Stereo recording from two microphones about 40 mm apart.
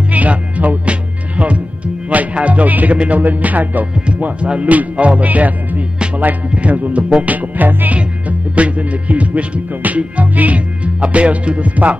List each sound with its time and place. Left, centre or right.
0.1 s music: right
3.0 s speech: right
4.4 s music: right
6.5 s speech: right
7.5 s music: right